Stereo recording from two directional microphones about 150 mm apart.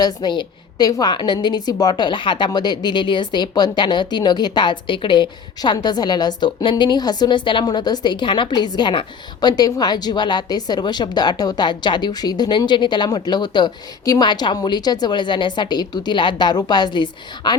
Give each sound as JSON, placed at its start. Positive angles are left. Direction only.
{"t": 0.0, "sound": "a woman's voice", "side_deg": 30}